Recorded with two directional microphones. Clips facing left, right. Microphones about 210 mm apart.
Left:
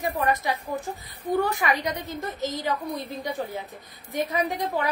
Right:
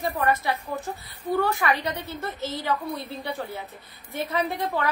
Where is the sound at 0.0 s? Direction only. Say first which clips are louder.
Even; 15° left (ahead or behind).